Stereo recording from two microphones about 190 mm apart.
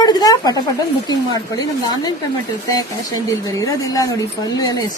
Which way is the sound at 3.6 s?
20° left (ahead or behind).